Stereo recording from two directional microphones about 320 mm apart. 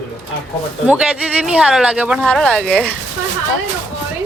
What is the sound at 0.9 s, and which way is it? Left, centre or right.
Speech, centre.